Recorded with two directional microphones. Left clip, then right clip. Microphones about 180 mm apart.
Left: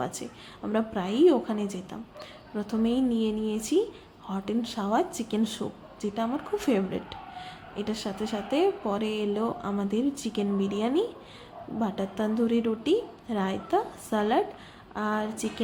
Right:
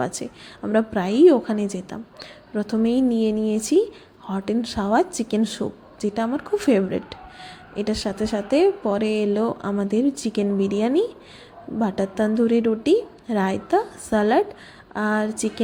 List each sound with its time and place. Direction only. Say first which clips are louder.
0.0 s speech: right 7 dB; 30° right (ahead or behind)